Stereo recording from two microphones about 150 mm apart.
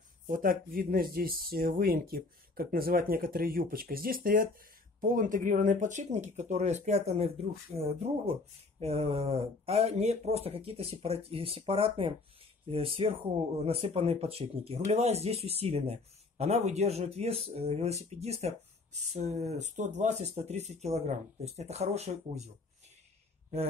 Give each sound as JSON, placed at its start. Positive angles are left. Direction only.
{"t": 0.3, "sound": "speech", "side_deg": -70}